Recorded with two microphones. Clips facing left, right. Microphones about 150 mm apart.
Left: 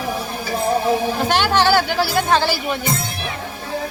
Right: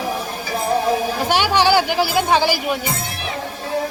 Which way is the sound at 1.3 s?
10° right (ahead or behind).